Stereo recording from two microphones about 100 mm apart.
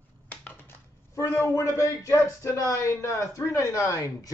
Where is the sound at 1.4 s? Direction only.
30° left (ahead or behind).